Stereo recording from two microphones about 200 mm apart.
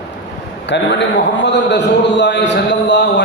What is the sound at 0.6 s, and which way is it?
A man's voice, 60° left (ahead or behind).